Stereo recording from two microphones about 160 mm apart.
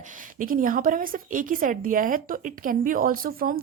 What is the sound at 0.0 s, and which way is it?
A woman's voice, 55° right (ahead or behind).